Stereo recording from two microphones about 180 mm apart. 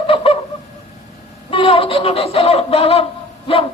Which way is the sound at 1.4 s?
30° left (ahead or behind).